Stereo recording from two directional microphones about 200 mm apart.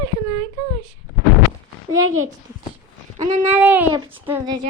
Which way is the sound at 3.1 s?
35° right (ahead or behind).